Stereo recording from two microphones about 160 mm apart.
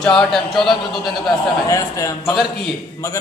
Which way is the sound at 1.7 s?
20° left (ahead or behind).